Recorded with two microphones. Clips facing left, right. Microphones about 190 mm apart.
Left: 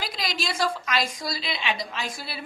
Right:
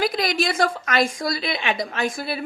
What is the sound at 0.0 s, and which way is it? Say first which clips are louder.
A woman's voice: right 9 dB; 55° right (ahead or behind).